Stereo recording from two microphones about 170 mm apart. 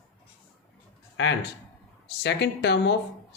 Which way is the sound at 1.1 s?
90° left.